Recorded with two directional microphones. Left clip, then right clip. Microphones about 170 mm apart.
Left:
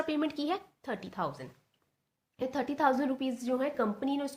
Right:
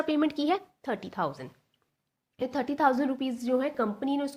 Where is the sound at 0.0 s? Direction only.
35° right (ahead or behind).